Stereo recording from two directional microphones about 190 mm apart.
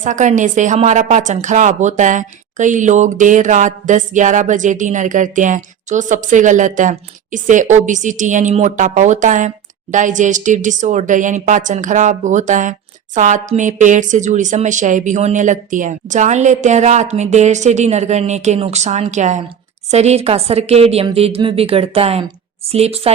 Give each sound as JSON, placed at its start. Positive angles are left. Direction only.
{"t": 0.0, "sound": "a woman's voice", "side_deg": -40}